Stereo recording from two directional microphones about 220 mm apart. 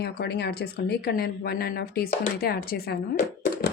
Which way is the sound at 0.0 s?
50° left (ahead or behind).